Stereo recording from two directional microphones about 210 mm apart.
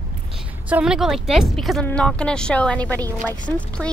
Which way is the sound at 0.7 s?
5° right (ahead or behind).